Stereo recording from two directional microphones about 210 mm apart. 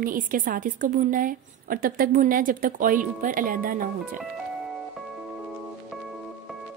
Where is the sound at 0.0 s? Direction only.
40° right (ahead or behind).